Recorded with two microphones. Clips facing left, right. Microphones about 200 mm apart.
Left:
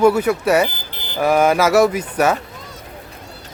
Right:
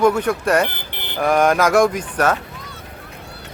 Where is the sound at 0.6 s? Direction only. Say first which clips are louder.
Even; 65° right (ahead or behind).